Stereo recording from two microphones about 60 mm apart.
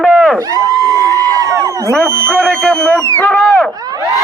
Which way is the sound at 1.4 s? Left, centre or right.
Right.